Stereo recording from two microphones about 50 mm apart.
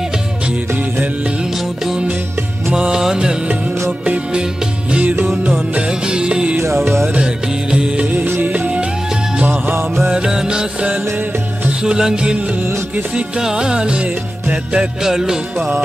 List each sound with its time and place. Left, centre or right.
2.7 s music: centre
4.0 s music: right
5.5 s music: centre
6.6 s music: right
7.7 s music: centre
10.0 s music: centre
13.4 s music: centre
15.0 s music: centre